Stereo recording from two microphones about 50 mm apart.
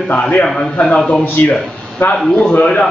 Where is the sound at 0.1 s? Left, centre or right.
Left.